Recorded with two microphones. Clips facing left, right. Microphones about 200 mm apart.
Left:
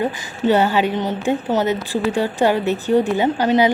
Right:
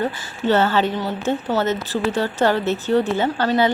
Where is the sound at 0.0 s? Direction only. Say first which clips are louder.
Left 3 dB; 15° left (ahead or behind).